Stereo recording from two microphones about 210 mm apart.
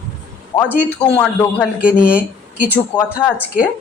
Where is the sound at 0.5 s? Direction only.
20° left (ahead or behind).